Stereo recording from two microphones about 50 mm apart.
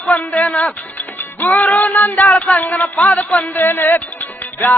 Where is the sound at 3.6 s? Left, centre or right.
Left.